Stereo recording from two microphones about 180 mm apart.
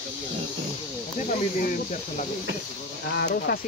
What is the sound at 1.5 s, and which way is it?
Speech, 45° left (ahead or behind).